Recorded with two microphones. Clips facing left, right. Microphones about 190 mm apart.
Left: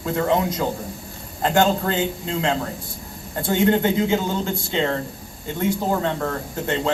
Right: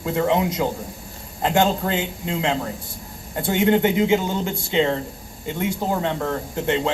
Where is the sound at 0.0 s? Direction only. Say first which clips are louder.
Even; 20° right (ahead or behind).